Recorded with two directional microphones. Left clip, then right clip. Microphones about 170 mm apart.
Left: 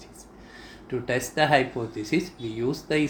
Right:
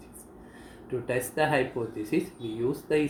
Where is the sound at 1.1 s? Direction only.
55° left (ahead or behind).